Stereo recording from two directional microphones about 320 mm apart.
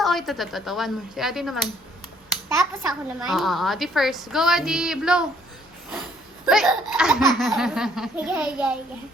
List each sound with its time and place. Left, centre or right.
0.0 s speech: centre
3.1 s speech: centre